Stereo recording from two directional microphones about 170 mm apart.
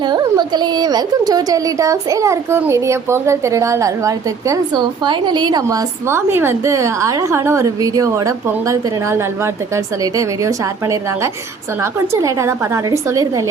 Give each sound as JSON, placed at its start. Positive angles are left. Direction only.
{"t": 0.0, "sound": "a woman's voice", "side_deg": -25}